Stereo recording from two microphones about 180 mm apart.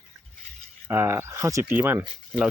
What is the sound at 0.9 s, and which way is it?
Speech, 15° right (ahead or behind).